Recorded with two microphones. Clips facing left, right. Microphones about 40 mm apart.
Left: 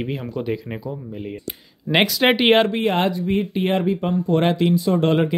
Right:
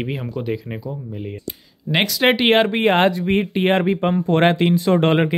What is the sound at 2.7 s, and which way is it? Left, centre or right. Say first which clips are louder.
Speech: right 4 dB; right.